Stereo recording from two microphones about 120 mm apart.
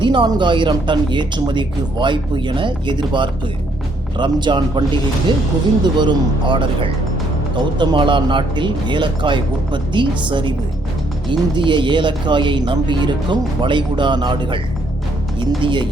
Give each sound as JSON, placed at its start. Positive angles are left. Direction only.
{"t": 0.0, "sound": "speech", "side_deg": -40}
{"t": 5.8, "sound": "speech", "side_deg": -40}